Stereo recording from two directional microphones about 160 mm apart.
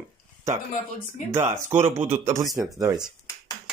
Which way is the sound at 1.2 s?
15° right (ahead or behind).